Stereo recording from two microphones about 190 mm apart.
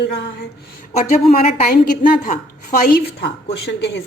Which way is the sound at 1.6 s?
45° left (ahead or behind).